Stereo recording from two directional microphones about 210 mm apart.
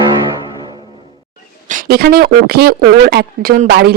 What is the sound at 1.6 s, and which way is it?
Speech, 45° right (ahead or behind).